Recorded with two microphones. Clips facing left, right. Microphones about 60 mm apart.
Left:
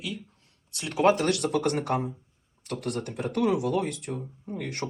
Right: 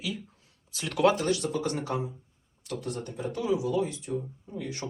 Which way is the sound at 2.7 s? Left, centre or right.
Left.